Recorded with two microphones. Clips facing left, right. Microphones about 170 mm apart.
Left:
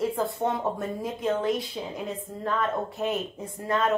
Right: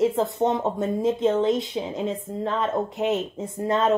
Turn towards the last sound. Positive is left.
turn(degrees=-25)  # may be behind; listen again after turning